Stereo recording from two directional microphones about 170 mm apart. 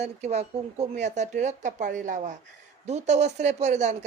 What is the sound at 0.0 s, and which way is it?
Speech, 40° right (ahead or behind).